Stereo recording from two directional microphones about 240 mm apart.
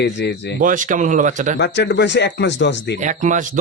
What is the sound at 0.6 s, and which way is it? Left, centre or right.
Speech, right.